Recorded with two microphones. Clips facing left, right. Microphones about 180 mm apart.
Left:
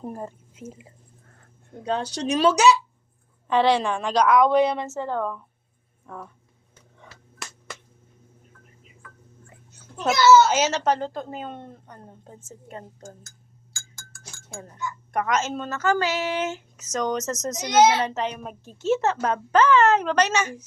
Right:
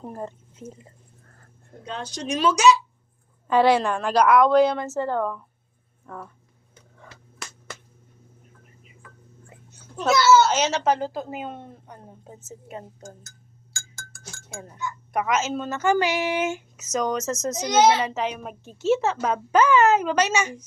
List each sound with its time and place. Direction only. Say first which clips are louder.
0.0 s speech: even; 10° left (ahead or behind)
2.2 s speech: even; 30° left (ahead or behind)
3.4 s a child's voice: right 2 dB; 5° right (ahead or behind)
10.0 s a child's voice: left 1 dB; 5° left (ahead or behind)
15.1 s a child's voice: right 1 dB; 5° right (ahead or behind)
15.7 s speech: right 2 dB; 15° right (ahead or behind)